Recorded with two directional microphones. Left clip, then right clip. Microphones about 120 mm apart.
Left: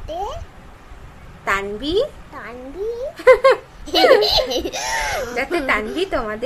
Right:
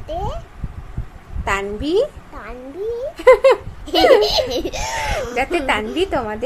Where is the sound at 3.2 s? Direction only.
30° right (ahead or behind).